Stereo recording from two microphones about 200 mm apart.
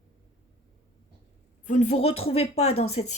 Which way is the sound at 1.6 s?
35° left (ahead or behind).